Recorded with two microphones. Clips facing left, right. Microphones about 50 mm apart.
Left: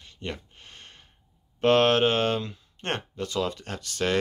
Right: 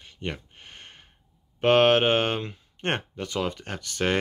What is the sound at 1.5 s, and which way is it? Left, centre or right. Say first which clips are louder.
Speech: right 1 dB; right.